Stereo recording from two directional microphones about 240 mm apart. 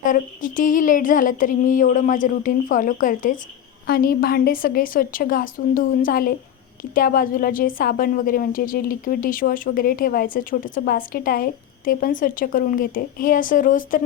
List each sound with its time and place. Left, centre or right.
0.0 s a woman's voice: left